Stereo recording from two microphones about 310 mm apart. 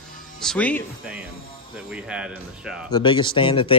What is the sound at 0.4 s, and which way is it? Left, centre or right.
Speech, centre.